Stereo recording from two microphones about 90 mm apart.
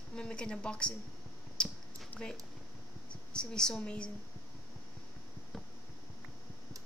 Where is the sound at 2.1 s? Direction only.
20° left (ahead or behind).